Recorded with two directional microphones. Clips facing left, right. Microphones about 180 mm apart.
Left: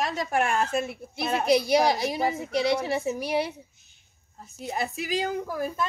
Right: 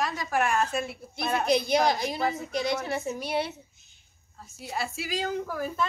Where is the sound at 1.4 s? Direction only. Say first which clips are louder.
Left 3 dB; 10° left (ahead or behind).